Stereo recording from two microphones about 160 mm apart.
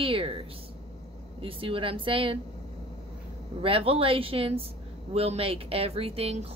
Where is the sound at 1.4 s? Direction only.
35° right (ahead or behind).